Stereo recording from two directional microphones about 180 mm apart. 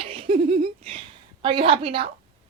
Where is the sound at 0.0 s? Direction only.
30° right (ahead or behind).